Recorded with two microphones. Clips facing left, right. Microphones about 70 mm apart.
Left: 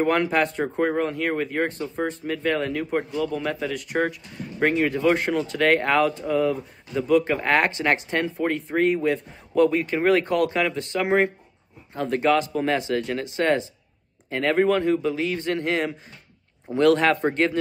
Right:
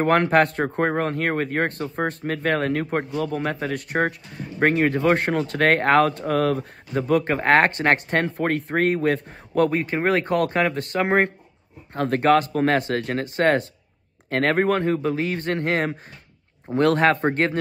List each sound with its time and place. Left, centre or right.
0.0 s speech: right
6.9 s speech: right
9.6 s speech: right